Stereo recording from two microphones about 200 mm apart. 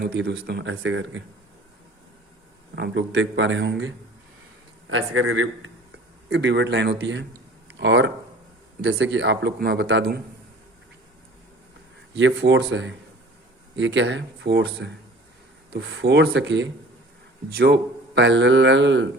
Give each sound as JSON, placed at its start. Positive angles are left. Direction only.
{"t": 0.0, "sound": "a man's voice", "side_deg": -55}
{"t": 2.7, "sound": "a man's voice", "side_deg": -60}
{"t": 4.9, "sound": "a man's voice", "side_deg": -80}
{"t": 6.3, "sound": "a man's voice", "side_deg": -60}
{"t": 12.1, "sound": "a man's voice", "side_deg": -65}